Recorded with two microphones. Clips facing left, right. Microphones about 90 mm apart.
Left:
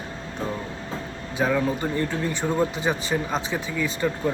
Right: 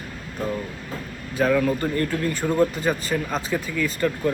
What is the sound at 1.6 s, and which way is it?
Speech, 20° left (ahead or behind).